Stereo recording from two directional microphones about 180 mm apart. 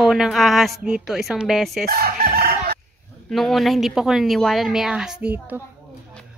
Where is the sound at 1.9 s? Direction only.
55° right (ahead or behind).